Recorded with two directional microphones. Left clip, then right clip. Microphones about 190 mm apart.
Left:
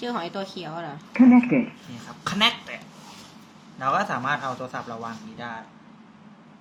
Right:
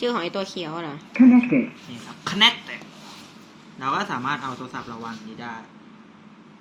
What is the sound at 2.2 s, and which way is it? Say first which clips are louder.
Speech: right 4 dB; 55° left (ahead or behind).